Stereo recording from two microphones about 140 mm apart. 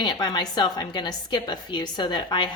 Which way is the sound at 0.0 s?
30° left (ahead or behind).